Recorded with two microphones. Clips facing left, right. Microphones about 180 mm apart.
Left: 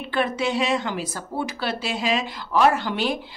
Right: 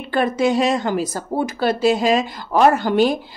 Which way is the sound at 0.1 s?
40° right (ahead or behind).